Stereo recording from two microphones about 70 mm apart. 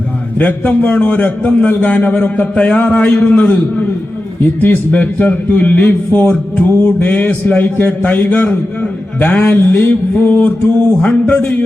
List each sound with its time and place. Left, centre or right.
0.3 s a man's voice: left